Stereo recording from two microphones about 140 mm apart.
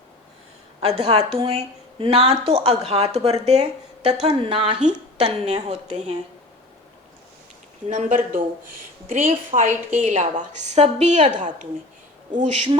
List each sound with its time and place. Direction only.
0.8 s speech: 45° right (ahead or behind)
4.3 s speech: 40° right (ahead or behind)
7.9 s speech: 65° right (ahead or behind)
9.6 s a woman's voice: 65° right (ahead or behind)